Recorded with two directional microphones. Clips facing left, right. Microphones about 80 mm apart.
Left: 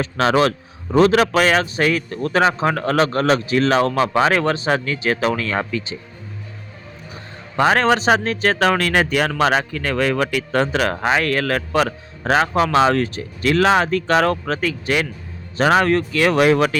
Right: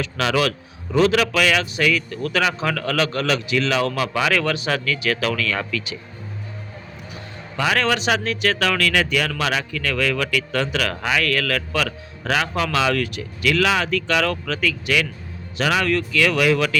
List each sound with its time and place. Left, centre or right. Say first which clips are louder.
0.0 s a man's voice: left 4 dB; left
7.1 s a man's voice: right 1 dB; left